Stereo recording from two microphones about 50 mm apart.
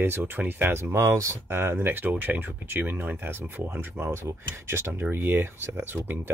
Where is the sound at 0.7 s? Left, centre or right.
Right.